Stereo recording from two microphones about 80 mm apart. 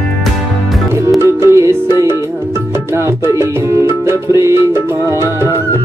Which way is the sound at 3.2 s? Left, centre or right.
Right.